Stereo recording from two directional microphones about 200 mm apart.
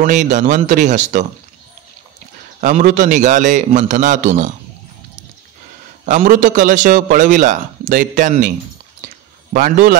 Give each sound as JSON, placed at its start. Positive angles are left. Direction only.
{"t": 0.0, "sound": "a man's voice", "side_deg": -40}
{"t": 2.6, "sound": "a man's voice", "side_deg": -40}
{"t": 6.0, "sound": "a man's voice", "side_deg": -40}